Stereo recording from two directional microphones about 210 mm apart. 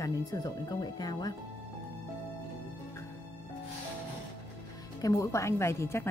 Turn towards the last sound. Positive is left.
turn(degrees=10)  # may be behind; listen again after turning